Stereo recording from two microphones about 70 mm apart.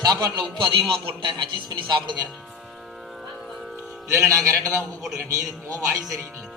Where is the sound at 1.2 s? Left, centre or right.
Right.